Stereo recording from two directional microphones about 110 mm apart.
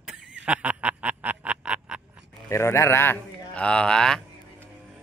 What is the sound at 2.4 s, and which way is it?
Speech, 25° left (ahead or behind).